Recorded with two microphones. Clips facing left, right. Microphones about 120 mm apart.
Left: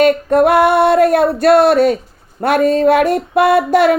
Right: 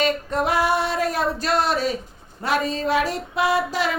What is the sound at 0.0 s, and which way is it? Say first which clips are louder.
Female singing: left 11 dB; 55° left (ahead or behind).